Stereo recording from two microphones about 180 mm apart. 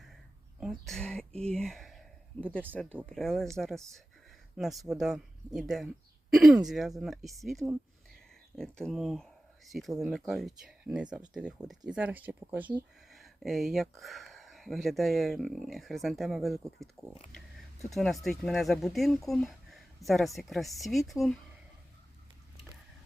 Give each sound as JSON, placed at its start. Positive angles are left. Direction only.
{"t": 0.6, "sound": "speech", "side_deg": 0}